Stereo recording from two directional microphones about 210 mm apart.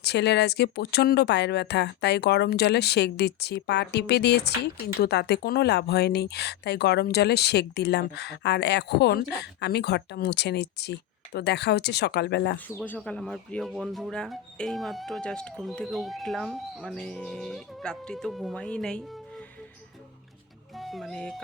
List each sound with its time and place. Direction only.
0.0 s speech: 55° left (ahead or behind)
12.5 s speech: 10° left (ahead or behind)
20.7 s speech: centre (ahead or behind)